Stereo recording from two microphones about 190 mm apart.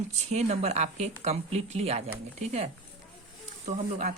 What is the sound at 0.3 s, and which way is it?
Speech, 35° right (ahead or behind).